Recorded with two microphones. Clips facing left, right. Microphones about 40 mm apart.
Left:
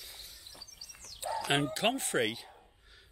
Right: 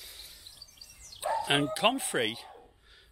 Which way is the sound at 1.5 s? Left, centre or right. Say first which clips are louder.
Right 2 dB; centre.